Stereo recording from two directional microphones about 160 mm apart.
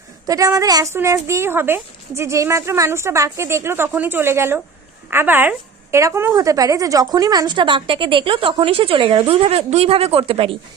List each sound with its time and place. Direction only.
0.3 s a woman's voice: 20° right (ahead or behind)